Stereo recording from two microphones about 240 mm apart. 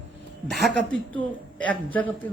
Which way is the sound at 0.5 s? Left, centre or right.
Centre.